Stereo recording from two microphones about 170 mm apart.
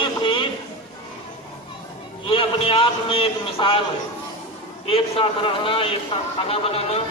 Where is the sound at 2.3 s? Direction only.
30° left (ahead or behind).